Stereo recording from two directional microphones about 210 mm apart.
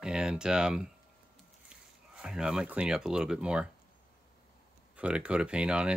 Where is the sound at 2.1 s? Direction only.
5° right (ahead or behind).